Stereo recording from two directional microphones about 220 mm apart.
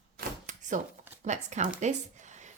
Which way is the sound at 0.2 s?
35° right (ahead or behind).